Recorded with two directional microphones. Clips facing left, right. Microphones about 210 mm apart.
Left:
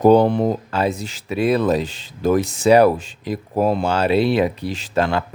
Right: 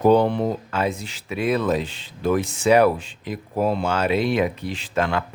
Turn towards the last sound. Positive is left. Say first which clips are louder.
# left 3 dB
turn(degrees=35)  # may be behind; listen again after turning